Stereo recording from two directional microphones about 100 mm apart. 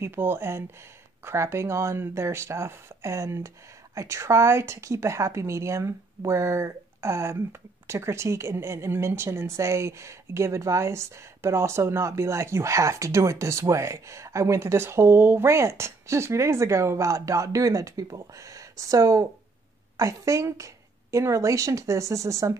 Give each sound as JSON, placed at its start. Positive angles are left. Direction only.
{"t": 0.0, "sound": "a woman's voice", "side_deg": -25}